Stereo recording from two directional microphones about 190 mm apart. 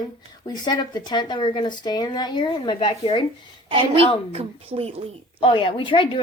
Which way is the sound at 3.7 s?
30° right (ahead or behind).